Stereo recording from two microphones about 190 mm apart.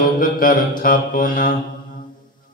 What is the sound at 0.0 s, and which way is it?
Speech, 45° left (ahead or behind).